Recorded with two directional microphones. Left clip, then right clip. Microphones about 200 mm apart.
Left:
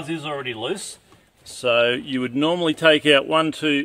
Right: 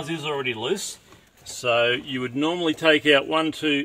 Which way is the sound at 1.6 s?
50° left (ahead or behind).